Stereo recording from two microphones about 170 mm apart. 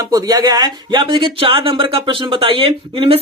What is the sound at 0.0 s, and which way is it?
Speech, 20° right (ahead or behind).